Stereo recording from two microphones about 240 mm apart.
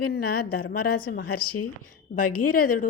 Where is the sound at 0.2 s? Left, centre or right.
Left.